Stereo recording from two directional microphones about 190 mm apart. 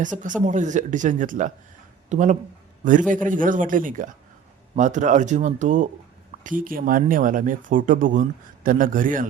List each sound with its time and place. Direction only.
0.0 s a man's voice: 40° right (ahead or behind)